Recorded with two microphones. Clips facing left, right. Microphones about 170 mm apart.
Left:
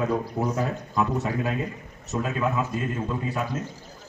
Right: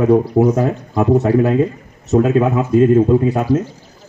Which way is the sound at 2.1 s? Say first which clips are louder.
Right 13 dB; 55° right (ahead or behind).